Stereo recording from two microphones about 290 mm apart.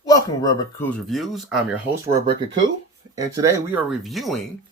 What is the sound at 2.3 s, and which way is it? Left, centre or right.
Speech, right.